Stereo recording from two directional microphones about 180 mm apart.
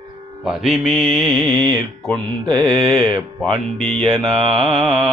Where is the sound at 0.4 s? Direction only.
5° right (ahead or behind).